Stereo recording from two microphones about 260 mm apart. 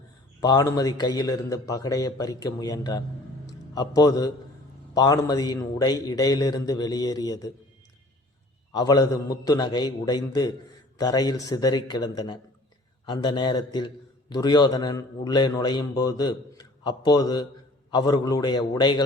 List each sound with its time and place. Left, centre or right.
0.3 s a man's voice: centre
3.4 s music: centre
4.9 s a man's voice: centre
8.7 s a man's voice: centre